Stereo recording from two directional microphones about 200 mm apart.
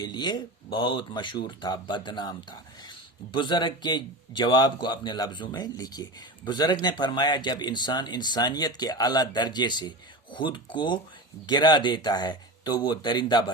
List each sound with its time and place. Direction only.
0.0 s a man's voice: 20° left (ahead or behind)